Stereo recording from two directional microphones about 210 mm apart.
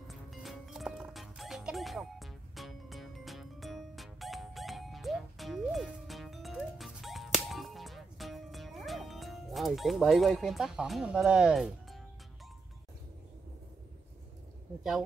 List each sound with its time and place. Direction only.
0.1 s music: centre (ahead or behind)